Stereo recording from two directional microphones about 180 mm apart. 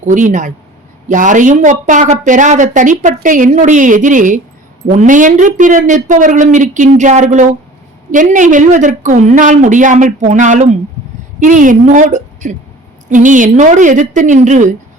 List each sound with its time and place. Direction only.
0.0 s a woman's voice: 45° right (ahead or behind)